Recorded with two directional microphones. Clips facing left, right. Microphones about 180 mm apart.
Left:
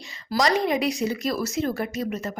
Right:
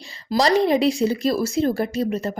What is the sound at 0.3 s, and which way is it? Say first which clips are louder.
A woman's voice: right 5 dB; 30° right (ahead or behind).